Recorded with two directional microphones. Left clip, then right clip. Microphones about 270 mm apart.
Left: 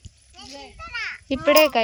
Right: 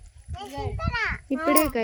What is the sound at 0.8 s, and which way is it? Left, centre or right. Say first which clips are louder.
Children playing: right 2 dB; centre.